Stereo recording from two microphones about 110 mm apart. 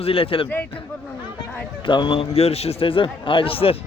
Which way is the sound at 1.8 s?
45° left (ahead or behind).